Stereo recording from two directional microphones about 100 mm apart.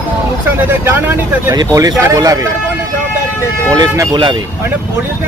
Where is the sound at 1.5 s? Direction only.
40° right (ahead or behind).